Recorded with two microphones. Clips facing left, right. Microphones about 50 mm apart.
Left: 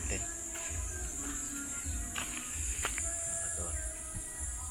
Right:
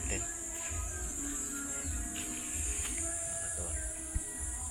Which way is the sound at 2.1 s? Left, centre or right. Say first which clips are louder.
Left 5 dB; left.